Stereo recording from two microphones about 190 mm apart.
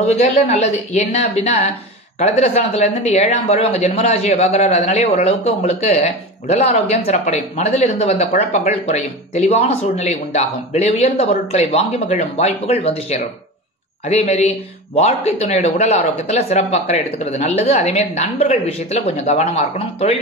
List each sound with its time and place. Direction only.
0.0 s speech: 35° left (ahead or behind)